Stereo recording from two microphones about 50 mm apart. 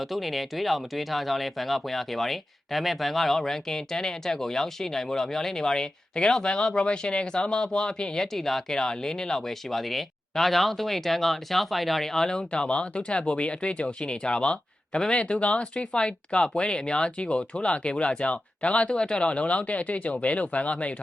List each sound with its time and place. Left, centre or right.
0.0 s speech: centre; by 20.9 s left